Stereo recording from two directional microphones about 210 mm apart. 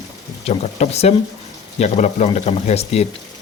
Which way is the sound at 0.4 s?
30° left (ahead or behind).